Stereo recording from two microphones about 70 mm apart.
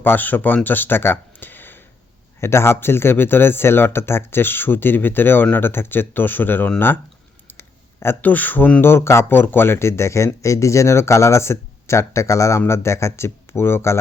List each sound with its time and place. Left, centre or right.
0.0 s speech: left
7.4 s a sound: left
8.8 s speech: left